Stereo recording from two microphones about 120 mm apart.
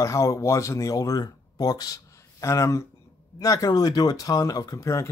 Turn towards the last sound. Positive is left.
turn(degrees=25)  # may be behind; listen again after turning